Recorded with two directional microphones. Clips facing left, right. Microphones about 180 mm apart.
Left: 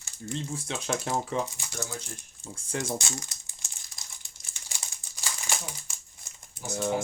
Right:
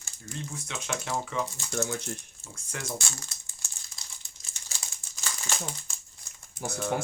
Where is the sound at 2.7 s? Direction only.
30° left (ahead or behind).